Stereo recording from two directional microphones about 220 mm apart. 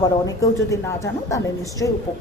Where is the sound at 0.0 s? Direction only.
15° left (ahead or behind).